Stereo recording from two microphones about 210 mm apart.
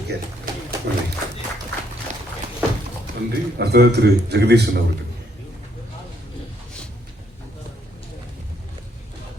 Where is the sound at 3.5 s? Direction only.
50° right (ahead or behind).